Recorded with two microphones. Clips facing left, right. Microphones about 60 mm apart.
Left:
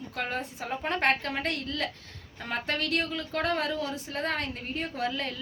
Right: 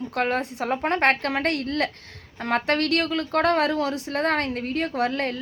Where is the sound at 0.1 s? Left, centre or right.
Right.